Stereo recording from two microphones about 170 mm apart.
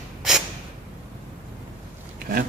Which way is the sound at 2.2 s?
60° right (ahead or behind).